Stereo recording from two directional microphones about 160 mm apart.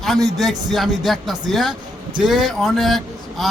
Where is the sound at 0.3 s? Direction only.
Centre (ahead or behind).